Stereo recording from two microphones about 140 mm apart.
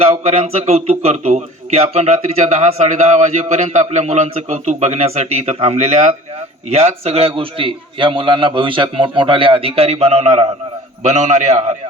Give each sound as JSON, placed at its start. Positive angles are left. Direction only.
{"t": 0.0, "sound": "a man's voice", "side_deg": -45}